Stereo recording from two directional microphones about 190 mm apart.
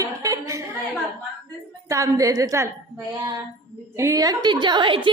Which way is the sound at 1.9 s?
15° right (ahead or behind).